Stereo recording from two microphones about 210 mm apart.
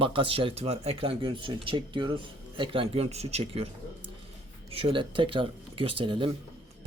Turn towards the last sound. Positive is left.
turn(degrees=-25)  # may be behind; listen again after turning